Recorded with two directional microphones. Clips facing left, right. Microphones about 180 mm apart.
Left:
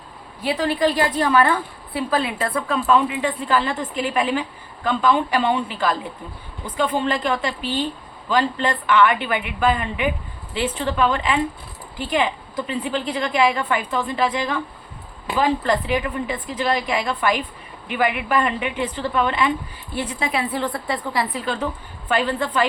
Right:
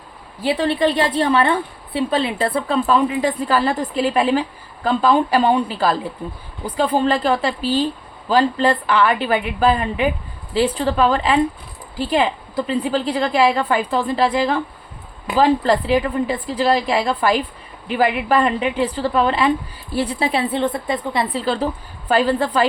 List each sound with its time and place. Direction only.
0.4 s a woman's voice: 30° right (ahead or behind)